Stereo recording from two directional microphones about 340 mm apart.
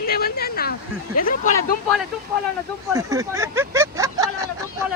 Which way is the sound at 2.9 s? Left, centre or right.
Centre.